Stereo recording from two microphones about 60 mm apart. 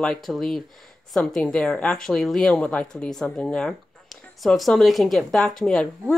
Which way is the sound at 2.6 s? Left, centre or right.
Left.